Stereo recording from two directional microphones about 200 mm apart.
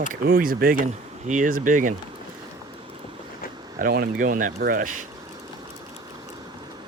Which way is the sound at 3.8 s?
50° right (ahead or behind).